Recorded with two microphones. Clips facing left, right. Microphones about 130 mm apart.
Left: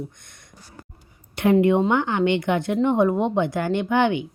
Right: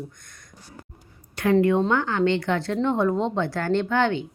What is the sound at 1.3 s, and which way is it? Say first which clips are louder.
A woman's voice: left 2 dB; 20° left (ahead or behind).